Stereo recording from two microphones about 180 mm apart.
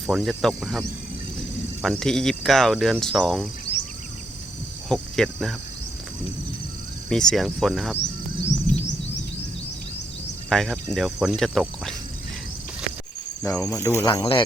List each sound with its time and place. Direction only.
0.1 s cricket: centre (ahead or behind)
1.8 s cricket: 5° left (ahead or behind)
3.7 s insect: 35° left (ahead or behind)
4.9 s cricket: centre (ahead or behind)
7.1 s cricket: 5° left (ahead or behind)
7.9 s insect: 80° left
10.5 s cricket: centre (ahead or behind)
13.4 s cricket: 5° left (ahead or behind)
13.7 s speech: 20° left (ahead or behind)